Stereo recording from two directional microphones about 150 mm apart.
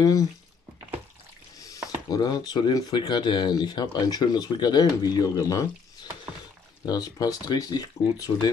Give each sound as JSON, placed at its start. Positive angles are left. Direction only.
{"t": 0.0, "sound": "speech", "side_deg": 25}
{"t": 2.0, "sound": "speech", "side_deg": 25}
{"t": 6.9, "sound": "speech", "side_deg": 25}